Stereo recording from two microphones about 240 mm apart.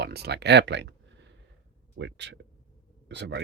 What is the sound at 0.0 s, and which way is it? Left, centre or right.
Speech, right.